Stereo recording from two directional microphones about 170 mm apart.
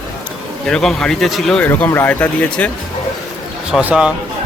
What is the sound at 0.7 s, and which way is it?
Speech, 5° left (ahead or behind).